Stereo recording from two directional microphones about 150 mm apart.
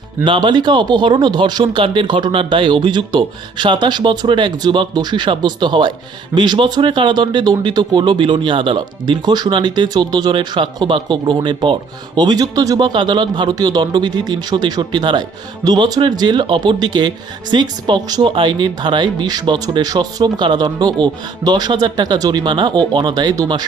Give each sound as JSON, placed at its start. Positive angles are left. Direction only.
{"t": 0.3, "sound": "speech", "side_deg": -30}